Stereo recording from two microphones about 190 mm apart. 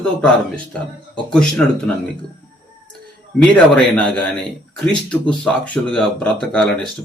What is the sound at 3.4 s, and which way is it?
Speech, 5° left (ahead or behind).